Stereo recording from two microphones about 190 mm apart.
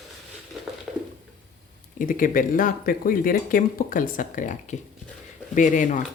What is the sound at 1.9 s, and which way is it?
Speech, 45° left (ahead or behind).